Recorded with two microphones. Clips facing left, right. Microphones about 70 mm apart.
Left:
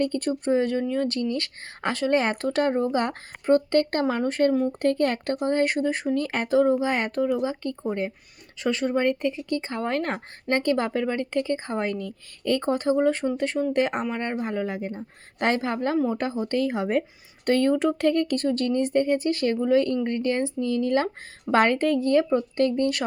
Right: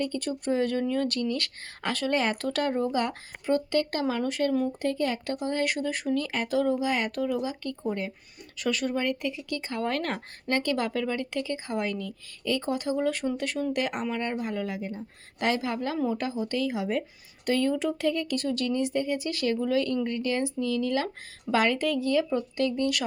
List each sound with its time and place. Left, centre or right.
0.0 s speech: left
0.5 s a woman's voice: left
4.8 s a woman's voice: left